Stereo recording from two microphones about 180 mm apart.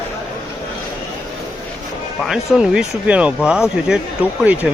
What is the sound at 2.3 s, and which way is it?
Speech, 5° right (ahead or behind).